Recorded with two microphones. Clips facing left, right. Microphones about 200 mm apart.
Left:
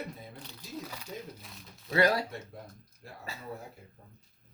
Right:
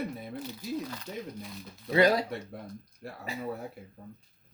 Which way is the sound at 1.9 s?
20° right (ahead or behind).